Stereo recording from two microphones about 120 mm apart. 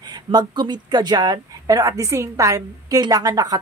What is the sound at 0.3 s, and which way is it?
A woman's voice, 35° right (ahead or behind).